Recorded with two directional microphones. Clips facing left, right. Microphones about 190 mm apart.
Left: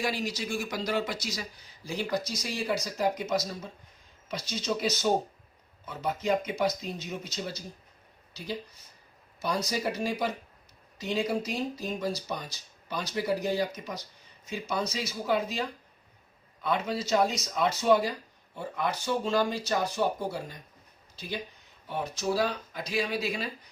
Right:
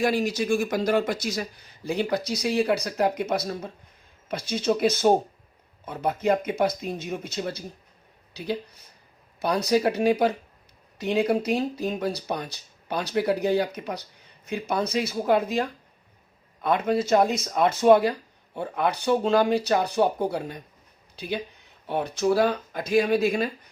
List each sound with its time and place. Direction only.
0.0 s speech: 50° right (ahead or behind)